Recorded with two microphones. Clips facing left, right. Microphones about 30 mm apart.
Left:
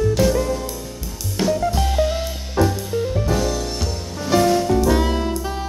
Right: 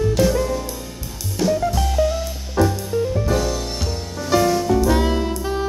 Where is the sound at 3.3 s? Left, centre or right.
Centre.